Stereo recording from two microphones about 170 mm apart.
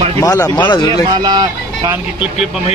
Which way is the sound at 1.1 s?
25° right (ahead or behind).